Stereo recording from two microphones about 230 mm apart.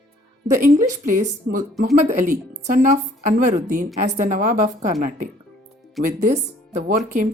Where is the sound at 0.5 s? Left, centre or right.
Right.